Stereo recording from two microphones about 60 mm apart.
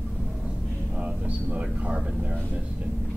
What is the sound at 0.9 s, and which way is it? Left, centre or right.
Speech, right.